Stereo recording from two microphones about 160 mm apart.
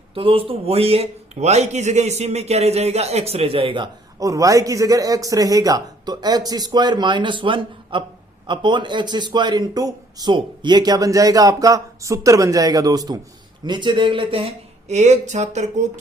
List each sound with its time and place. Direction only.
0.1 s speech: 35° right (ahead or behind)
4.2 s a man's voice: 20° right (ahead or behind); by 15.9 s 45° right (ahead or behind)